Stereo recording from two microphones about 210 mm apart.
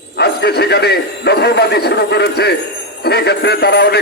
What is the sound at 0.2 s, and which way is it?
A man's voice, 50° left (ahead or behind).